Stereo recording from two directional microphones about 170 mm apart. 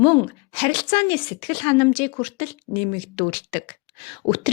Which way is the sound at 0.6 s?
30° left (ahead or behind).